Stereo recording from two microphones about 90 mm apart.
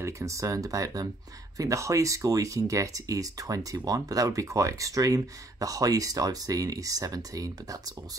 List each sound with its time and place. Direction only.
0.0 s speech: 35° right (ahead or behind)